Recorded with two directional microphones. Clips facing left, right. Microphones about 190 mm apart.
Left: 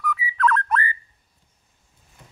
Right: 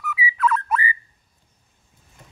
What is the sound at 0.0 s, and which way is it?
Whistle, 5° right (ahead or behind).